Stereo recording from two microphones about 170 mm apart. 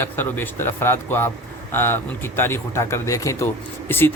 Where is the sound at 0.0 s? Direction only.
10° left (ahead or behind).